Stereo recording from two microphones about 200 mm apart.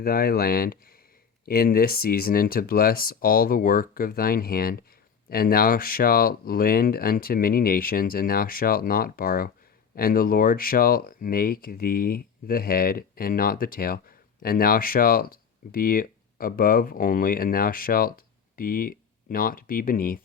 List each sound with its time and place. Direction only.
0.0 s speech: 50° left (ahead or behind)